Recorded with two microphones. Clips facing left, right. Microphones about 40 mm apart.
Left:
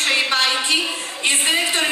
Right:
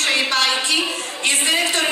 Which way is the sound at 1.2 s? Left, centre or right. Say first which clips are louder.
Even; centre.